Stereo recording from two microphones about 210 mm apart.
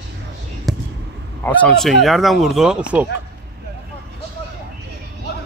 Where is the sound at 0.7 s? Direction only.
Centre (ahead or behind).